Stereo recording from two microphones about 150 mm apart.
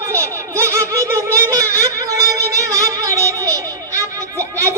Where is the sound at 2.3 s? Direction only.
20° right (ahead or behind).